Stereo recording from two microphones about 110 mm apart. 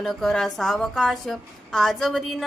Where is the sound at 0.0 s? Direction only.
Centre (ahead or behind).